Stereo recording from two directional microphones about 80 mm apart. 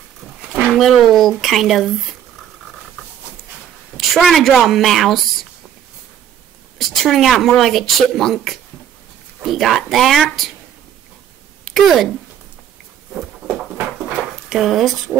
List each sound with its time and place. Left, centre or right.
0.7 s speech: centre
3.9 s a woman's voice: centre
6.8 s speech: centre
11.6 s speech: centre
14.5 s speech: centre